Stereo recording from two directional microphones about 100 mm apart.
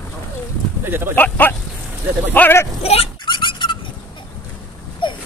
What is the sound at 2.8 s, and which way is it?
Speech, 90° left.